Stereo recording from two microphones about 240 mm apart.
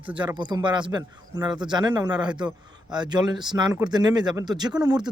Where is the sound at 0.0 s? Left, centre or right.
Right.